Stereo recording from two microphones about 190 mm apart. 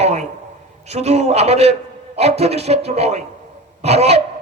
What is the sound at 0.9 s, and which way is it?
A man's voice, 35° right (ahead or behind).